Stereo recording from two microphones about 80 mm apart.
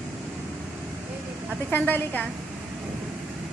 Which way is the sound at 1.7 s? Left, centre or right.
Left.